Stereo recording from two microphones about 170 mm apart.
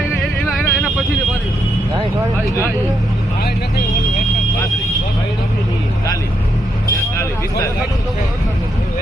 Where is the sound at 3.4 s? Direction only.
70° left (ahead or behind).